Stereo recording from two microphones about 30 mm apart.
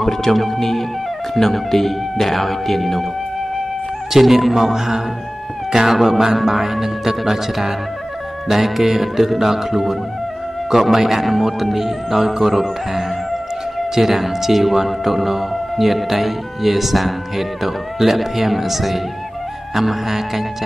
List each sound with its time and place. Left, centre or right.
0.2 s speech: centre
4.1 s speech: centre
4.7 s speech: centre